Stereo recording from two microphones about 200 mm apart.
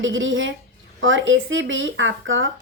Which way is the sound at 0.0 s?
70° right (ahead or behind).